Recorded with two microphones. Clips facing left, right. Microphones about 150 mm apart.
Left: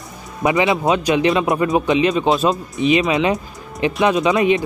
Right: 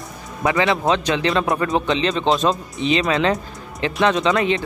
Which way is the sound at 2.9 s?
20° left (ahead or behind).